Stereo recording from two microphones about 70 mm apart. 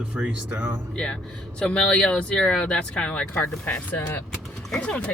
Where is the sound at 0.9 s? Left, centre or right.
Centre.